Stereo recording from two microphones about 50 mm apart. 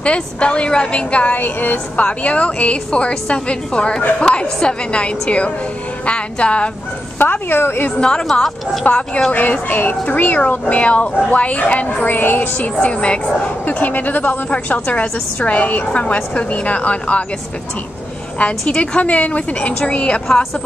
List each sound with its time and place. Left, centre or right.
0.0 s a woman's voice: left
1.4 s a woman's voice: left
2.0 s a woman's voice: left
7.2 s speech: left
8.0 s speech: centre
8.8 s a woman's voice: left
12.5 s a woman's voice: left
13.7 s a woman's voice: left
18.4 s a woman's voice: left